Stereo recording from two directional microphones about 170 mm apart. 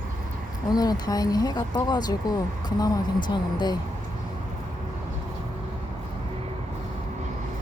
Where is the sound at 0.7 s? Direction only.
25° left (ahead or behind).